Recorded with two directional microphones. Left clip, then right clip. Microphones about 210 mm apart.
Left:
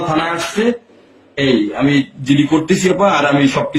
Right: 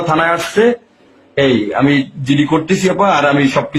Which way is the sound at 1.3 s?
40° right (ahead or behind).